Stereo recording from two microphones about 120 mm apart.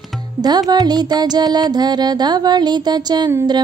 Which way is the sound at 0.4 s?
35° right (ahead or behind).